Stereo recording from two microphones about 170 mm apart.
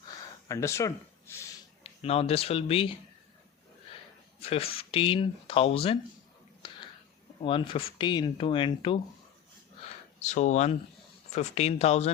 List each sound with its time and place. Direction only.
0.4 s speech: 15° left (ahead or behind)
1.8 s speech: 35° left (ahead or behind)
4.4 s speech: 35° left (ahead or behind)
7.4 s speech: 30° left (ahead or behind)
10.2 s speech: 45° left (ahead or behind)